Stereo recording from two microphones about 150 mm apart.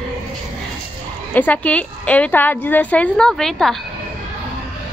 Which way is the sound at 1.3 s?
10° left (ahead or behind).